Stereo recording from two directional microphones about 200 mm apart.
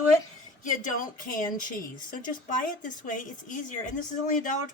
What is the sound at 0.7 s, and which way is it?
A woman's voice, 40° left (ahead or behind).